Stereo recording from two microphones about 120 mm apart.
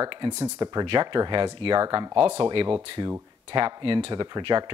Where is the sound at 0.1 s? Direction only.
40° right (ahead or behind).